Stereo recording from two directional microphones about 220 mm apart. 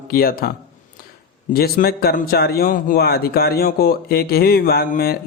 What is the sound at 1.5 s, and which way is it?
A man's voice, 40° left (ahead or behind).